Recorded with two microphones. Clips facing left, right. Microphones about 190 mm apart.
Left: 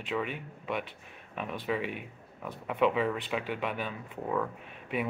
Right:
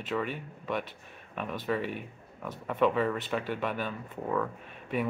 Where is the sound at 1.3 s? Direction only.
5° left (ahead or behind).